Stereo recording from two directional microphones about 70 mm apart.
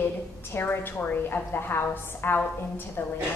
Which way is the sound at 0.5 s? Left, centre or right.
Left.